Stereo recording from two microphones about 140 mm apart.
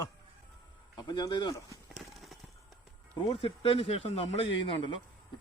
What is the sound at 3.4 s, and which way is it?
A man's voice, 40° left (ahead or behind).